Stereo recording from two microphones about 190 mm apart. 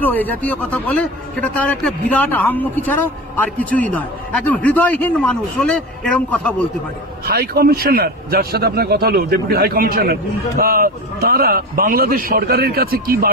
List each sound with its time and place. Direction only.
0.0 s a man's voice: 10° left (ahead or behind)
7.2 s a man's voice: 55° right (ahead or behind)